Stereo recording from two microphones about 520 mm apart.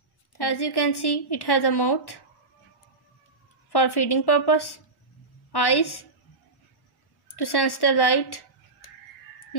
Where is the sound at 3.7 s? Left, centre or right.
Left.